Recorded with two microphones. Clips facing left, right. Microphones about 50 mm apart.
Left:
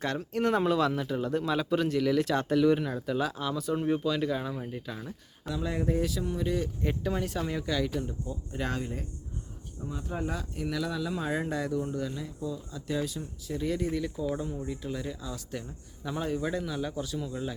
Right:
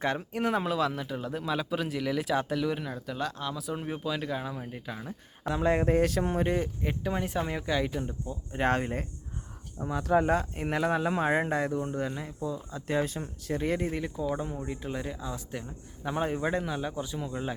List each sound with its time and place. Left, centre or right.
0.0 s speech: centre
5.5 s speech: right
6.8 s speech: centre
8.6 s speech: right
9.8 s speech: right
10.2 s speech: right
12.9 s speech: right
13.2 s speech: right